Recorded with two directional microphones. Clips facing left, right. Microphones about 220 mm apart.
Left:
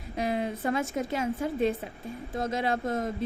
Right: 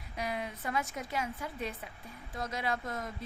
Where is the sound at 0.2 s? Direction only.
30° left (ahead or behind).